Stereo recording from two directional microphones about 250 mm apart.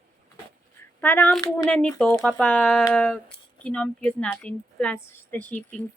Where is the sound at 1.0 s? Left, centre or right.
Centre.